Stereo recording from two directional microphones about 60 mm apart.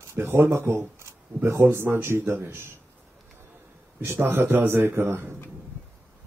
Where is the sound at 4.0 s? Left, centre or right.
Right.